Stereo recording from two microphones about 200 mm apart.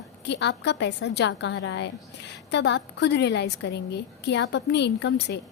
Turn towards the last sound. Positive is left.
turn(degrees=60)  # may be behind; listen again after turning